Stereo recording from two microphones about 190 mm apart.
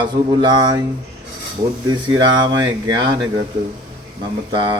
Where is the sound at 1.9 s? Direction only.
20° right (ahead or behind).